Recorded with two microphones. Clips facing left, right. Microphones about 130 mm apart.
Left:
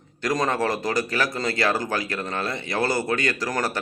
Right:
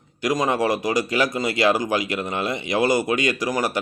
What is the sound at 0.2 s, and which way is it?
A man's voice, 15° right (ahead or behind).